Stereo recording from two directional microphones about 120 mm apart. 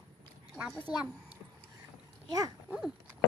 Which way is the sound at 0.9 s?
5° right (ahead or behind).